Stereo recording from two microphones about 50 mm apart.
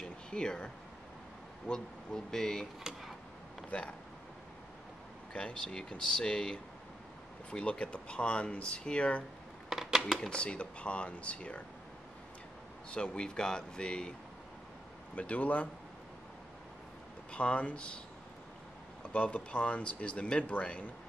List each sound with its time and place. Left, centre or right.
0.0 s a sound: centre
1.7 s speech: centre
2.8 s a sound: centre
3.7 s speech: left
5.3 s speech: centre
9.7 s a sound: centre
10.3 s speech: left
12.9 s speech: left
15.1 s speech: left
17.3 s speech: left
19.1 s speech: left